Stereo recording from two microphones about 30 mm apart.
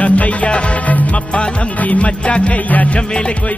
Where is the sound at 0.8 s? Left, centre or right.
Left.